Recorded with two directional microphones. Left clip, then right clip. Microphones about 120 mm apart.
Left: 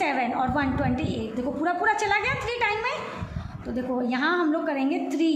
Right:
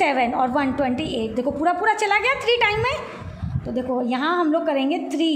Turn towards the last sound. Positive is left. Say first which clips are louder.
# right 3 dB
turn(degrees=-40)  # may be behind; listen again after turning